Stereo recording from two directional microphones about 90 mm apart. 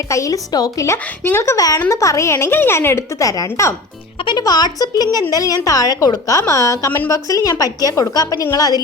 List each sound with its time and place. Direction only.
0.1 s a woman's voice: 40° left (ahead or behind)
1.2 s a woman's voice: 30° left (ahead or behind)
4.4 s a woman's voice: 50° left (ahead or behind)